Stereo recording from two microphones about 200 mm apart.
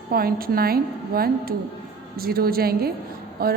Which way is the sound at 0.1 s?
50° right (ahead or behind).